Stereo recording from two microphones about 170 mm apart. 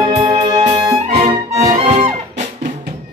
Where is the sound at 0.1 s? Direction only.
35° right (ahead or behind).